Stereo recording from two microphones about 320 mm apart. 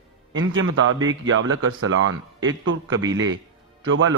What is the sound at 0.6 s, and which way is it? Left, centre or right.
A man's voice, right.